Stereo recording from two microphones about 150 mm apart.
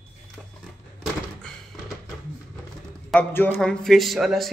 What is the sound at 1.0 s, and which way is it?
Thunk, centre (ahead or behind).